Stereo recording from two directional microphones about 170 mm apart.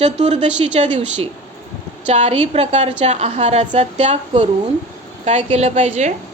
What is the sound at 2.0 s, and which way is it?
A woman's voice, 40° right (ahead or behind).